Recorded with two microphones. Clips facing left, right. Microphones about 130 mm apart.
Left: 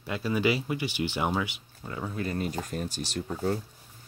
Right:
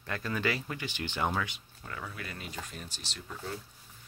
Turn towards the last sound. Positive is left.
turn(degrees=45)  # may be behind; listen again after turning